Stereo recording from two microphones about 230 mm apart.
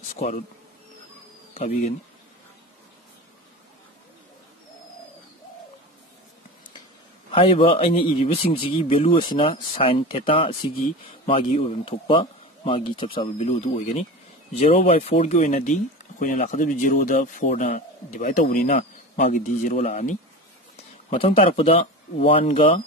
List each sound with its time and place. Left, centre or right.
0.1 s insect: left
7.2 s a man's voice: left